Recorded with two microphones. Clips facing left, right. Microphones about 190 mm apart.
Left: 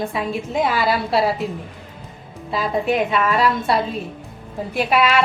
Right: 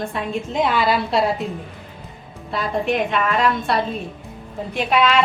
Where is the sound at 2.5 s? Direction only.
5° left (ahead or behind).